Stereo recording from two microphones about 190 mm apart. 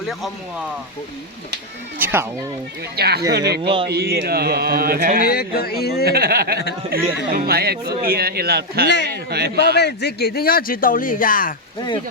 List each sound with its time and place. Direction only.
2.0 s speech: 10° right (ahead or behind)
2.9 s speech: 55° right (ahead or behind)
3.6 s speech: 25° right (ahead or behind)
3.8 s speech: 55° right (ahead or behind)
5.2 s speech: 55° left (ahead or behind)
6.1 s speech: 55° right (ahead or behind)
9.7 s speech: 60° left (ahead or behind)